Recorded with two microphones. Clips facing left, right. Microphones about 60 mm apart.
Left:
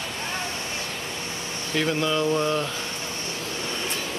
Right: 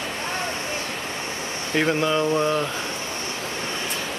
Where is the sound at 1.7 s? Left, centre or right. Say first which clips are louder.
Right 3 dB; right.